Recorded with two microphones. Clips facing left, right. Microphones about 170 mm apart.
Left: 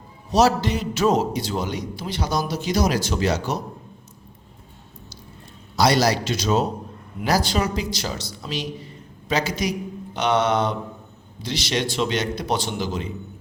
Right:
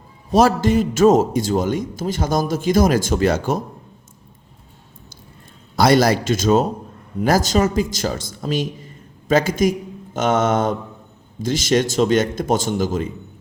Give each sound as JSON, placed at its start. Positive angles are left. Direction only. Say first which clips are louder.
{"t": 0.3, "sound": "a man's voice", "louder": "right 4 dB", "side_deg": -50}
{"t": 5.7, "sound": "a man's voice", "louder": "right 4 dB", "side_deg": -50}